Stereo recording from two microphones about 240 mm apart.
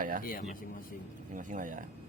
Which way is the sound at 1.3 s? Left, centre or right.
Right.